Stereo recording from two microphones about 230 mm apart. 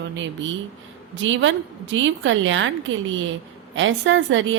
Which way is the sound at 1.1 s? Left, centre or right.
Right.